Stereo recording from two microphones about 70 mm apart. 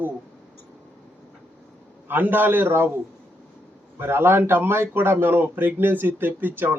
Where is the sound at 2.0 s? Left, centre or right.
Right.